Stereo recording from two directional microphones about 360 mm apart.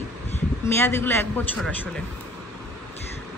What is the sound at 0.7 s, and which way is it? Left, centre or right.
Speech, centre.